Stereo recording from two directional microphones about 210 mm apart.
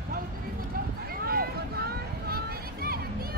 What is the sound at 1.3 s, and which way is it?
Vehicle, 45° right (ahead or behind).